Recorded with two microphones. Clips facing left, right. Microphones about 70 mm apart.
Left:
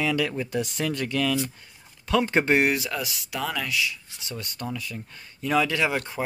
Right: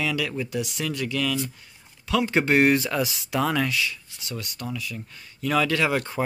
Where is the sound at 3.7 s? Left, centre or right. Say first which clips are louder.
Even; centre.